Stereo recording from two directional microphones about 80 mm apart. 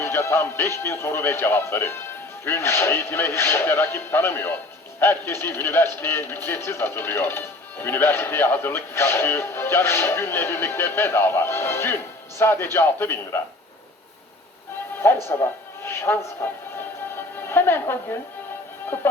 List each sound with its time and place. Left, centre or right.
0.0 s speech: left
15.3 s music: left